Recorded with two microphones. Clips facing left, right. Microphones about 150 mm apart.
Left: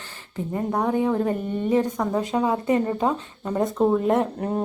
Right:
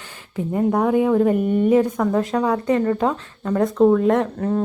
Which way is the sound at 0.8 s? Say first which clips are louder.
Right 5 dB; 10° right (ahead or behind).